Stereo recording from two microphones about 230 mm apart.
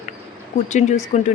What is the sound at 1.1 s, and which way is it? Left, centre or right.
Speech, left.